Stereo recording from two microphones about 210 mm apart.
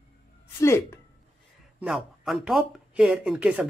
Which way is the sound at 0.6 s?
10° left (ahead or behind).